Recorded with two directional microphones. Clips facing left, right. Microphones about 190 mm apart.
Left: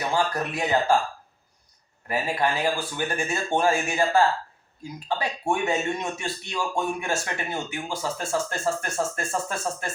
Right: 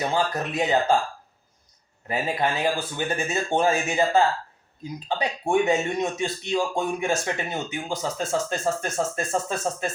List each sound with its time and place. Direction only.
0.1 s speech: 20° right (ahead or behind)
2.0 s a man's voice: 20° right (ahead or behind)